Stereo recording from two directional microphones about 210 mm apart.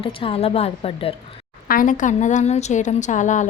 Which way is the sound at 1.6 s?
40° left (ahead or behind).